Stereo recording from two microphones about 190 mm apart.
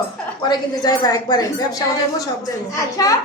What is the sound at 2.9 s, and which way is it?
Speech, 15° left (ahead or behind).